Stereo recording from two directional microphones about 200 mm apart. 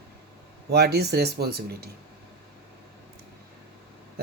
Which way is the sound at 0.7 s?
55° right (ahead or behind).